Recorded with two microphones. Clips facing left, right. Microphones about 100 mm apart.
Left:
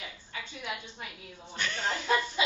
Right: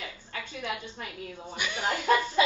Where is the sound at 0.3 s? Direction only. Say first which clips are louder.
Right 4 dB; 50° right (ahead or behind).